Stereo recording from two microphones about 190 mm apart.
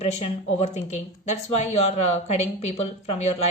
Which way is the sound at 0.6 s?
35° left (ahead or behind).